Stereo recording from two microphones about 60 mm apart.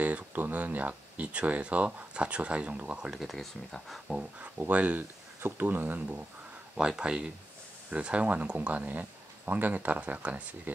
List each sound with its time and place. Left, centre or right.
0.0 s speech: right; by 3.2 s centre
3.2 s speech: centre
4.4 s speech: right
6.8 s speech: centre